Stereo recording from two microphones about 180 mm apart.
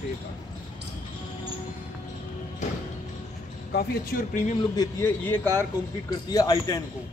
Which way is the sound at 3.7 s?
50° left (ahead or behind).